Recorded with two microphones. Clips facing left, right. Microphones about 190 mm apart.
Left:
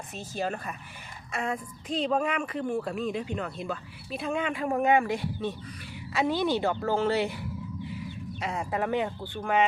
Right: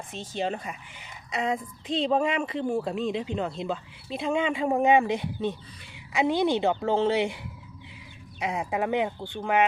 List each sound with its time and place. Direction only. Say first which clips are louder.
0.1 s speech: right 2 dB; 20° right (ahead or behind)
7.9 s a sound: left 11 dB; 15° right (ahead or behind)
9.2 s speech: right 1 dB; 15° right (ahead or behind)